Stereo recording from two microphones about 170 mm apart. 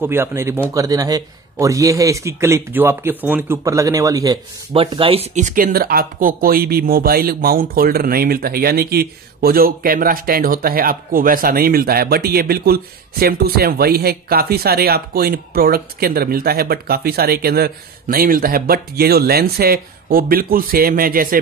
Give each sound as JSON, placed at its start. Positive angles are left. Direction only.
{"t": 0.0, "sound": "a man's voice", "side_deg": -15}
{"t": 4.7, "sound": "speech", "side_deg": -35}